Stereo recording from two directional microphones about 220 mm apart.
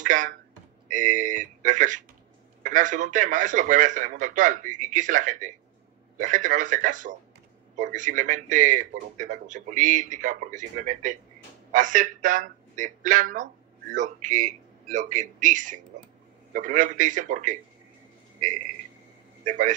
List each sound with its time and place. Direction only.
0.0 s speech: 35° right (ahead or behind)
19.4 s a man's voice: 35° right (ahead or behind)